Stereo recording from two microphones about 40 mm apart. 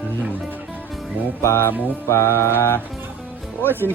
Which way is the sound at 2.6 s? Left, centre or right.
Left.